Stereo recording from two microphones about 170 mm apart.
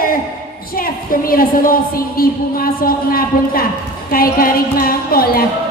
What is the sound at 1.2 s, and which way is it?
A woman's voice, 60° left (ahead or behind).